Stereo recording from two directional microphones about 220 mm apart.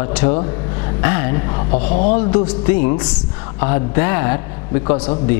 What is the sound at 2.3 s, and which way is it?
A woman's voice, 10° left (ahead or behind).